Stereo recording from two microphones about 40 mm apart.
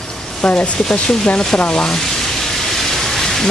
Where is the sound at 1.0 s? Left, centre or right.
Centre.